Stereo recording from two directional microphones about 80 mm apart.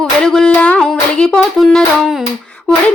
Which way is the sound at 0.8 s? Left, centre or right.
Centre.